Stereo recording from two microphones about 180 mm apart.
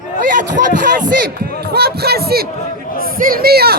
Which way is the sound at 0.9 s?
50° right (ahead or behind).